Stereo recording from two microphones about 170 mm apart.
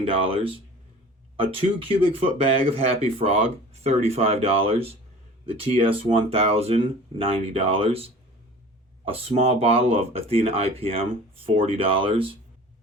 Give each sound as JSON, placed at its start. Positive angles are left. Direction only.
{"t": 0.0, "sound": "speech", "side_deg": -30}